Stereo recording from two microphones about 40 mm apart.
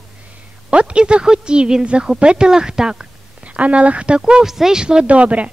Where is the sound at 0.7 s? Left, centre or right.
Right.